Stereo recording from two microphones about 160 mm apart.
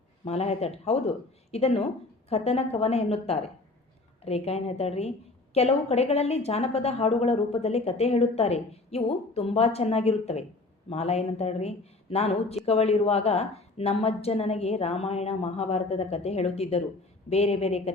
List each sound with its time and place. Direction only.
0.3 s a woman's voice: 40° left (ahead or behind)